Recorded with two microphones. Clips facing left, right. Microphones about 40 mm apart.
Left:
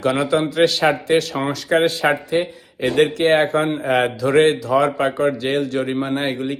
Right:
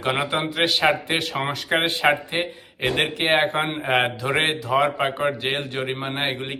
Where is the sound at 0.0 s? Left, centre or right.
Right.